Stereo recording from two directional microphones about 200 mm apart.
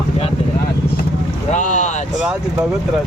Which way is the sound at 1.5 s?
35° left (ahead or behind).